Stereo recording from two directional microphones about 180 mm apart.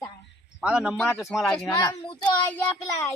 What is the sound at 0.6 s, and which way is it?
Speech, 5° right (ahead or behind).